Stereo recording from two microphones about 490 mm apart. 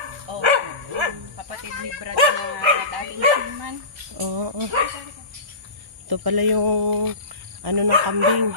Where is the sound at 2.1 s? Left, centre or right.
Right.